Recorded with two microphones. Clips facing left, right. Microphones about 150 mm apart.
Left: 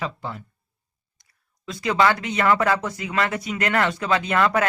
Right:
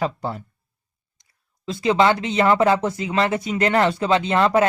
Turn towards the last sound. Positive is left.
turn(degrees=-25)  # may be behind; listen again after turning